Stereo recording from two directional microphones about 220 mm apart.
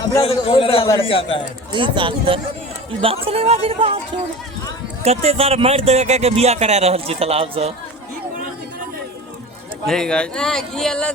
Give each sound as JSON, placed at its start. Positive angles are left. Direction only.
{"t": 0.0, "sound": "a man's voice", "side_deg": 20}
{"t": 1.7, "sound": "speech", "side_deg": -25}
{"t": 5.0, "sound": "speech", "side_deg": -30}
{"t": 9.8, "sound": "speech", "side_deg": 5}